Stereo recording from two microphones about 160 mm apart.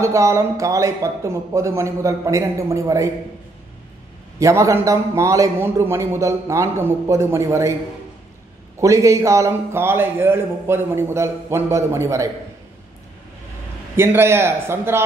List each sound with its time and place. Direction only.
0.0 s a man's voice: 20° right (ahead or behind)
4.4 s a man's voice: 20° right (ahead or behind)
8.7 s a man's voice: 20° right (ahead or behind)
13.9 s a man's voice: 15° right (ahead or behind)